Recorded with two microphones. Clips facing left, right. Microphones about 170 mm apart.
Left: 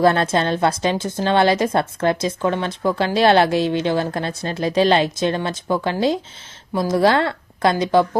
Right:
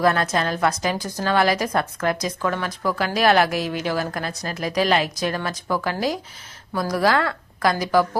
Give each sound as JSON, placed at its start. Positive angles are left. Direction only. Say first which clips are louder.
{"t": 0.0, "sound": "a woman's voice", "louder": "left 4 dB", "side_deg": 30}